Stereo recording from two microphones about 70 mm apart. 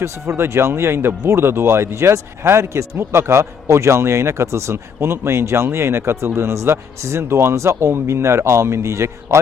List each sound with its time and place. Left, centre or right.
0.0 s speech: right